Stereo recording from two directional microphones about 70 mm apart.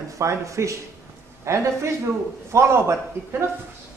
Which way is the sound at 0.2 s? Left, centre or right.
Right.